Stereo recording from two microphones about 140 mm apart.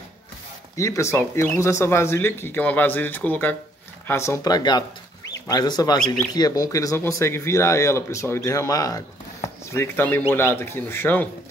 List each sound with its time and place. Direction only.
0.7 s speech: 20° left (ahead or behind)